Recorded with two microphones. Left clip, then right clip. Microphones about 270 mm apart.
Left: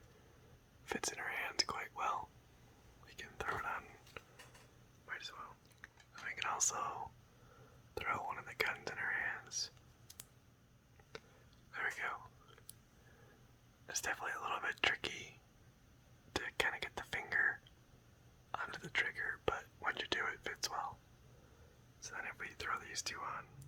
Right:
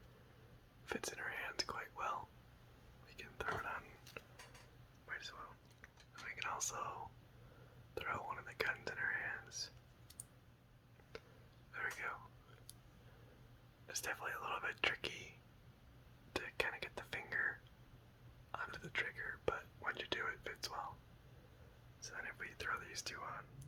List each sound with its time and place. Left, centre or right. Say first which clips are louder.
0.9 s whispering: left 3 dB; centre
4.2 s a sound: left 1 dB; centre
5.0 s whispering: left 2 dB; centre
11.1 s a sound: left 1 dB; centre
11.7 s whispering: left 3 dB; centre
13.8 s whispering: left 3 dB; centre
22.0 s speech: left 2 dB; centre